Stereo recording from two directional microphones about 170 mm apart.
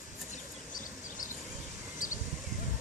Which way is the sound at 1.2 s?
50° left (ahead or behind).